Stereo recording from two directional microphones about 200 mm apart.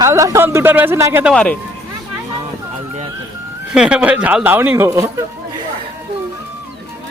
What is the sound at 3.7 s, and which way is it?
A man's voice, 5° right (ahead or behind).